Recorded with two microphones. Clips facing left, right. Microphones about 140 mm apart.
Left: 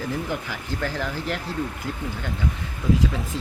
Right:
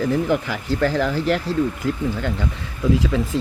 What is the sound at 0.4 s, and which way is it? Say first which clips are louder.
Speech: right 8 dB; 90° right.